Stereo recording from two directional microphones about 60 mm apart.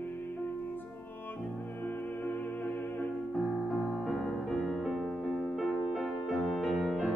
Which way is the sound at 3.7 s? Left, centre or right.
Centre.